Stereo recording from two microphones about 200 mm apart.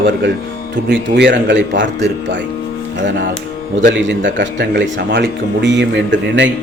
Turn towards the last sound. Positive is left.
turn(degrees=-60)  # may be behind; listen again after turning